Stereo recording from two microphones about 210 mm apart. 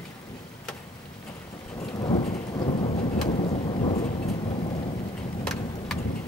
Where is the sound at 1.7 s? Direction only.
20° left (ahead or behind).